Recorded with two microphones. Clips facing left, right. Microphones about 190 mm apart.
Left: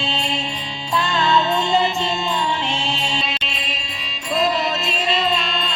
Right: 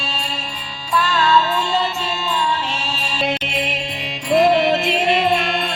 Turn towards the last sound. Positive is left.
turn(degrees=-55)  # may be behind; listen again after turning